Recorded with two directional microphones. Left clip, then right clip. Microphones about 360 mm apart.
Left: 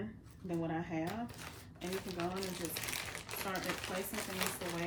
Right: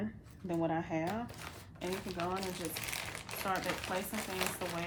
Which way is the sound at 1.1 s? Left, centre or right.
Centre.